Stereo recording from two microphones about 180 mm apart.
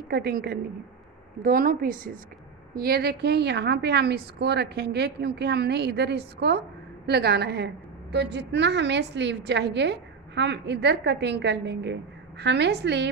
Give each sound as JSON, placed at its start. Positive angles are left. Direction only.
{"t": 0.1, "sound": "a woman's voice", "side_deg": -60}